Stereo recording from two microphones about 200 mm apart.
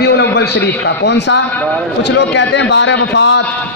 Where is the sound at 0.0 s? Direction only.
55° left (ahead or behind).